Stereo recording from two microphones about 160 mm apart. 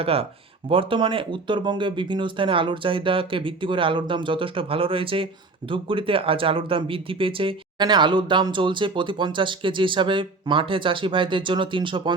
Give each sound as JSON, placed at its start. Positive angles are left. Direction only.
{"t": 0.0, "sound": "speech", "side_deg": -35}